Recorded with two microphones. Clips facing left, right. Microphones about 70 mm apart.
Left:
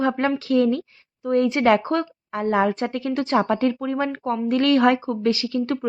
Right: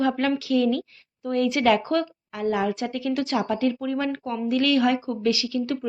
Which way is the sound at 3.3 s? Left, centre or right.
Left.